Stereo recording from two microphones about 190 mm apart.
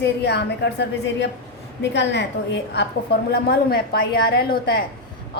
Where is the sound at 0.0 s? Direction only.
60° left (ahead or behind).